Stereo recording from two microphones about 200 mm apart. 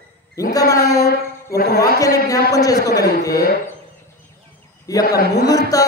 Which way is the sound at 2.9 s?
50° left (ahead or behind).